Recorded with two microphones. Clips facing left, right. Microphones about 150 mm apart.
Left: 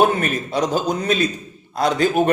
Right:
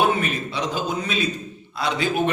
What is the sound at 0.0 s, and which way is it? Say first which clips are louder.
A man's voice: left 4 dB; 45° left (ahead or behind).